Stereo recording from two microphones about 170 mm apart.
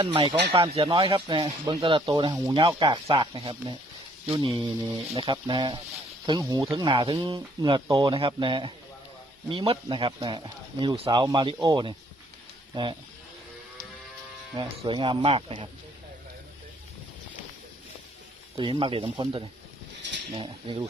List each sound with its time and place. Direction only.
0.0 s speech: 30° right (ahead or behind)
14.8 s speech: 30° right (ahead or behind)
18.5 s speech: 30° right (ahead or behind)